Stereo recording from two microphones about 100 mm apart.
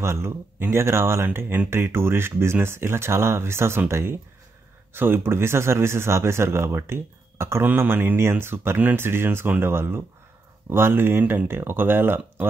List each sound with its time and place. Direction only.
0.0 s speech: 25° right (ahead or behind)